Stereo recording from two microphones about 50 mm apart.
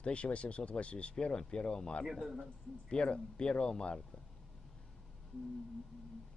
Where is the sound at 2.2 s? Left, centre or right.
Centre.